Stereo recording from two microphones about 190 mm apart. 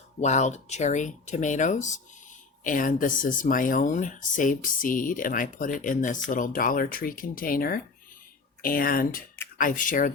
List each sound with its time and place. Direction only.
0.2 s speech: 40° left (ahead or behind)